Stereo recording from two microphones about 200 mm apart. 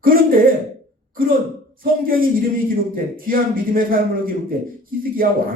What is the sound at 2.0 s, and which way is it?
A man's voice, 45° right (ahead or behind).